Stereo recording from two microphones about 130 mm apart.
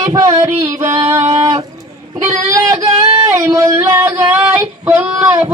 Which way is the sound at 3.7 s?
15° right (ahead or behind).